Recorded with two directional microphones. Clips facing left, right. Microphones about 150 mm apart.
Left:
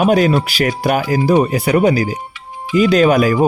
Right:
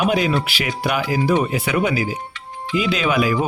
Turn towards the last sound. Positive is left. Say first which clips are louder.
# left 7 dB
turn(degrees=45)  # may be behind; listen again after turning